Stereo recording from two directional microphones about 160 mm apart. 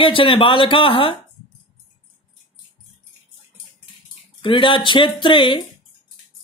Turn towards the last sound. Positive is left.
turn(degrees=30)  # may be behind; listen again after turning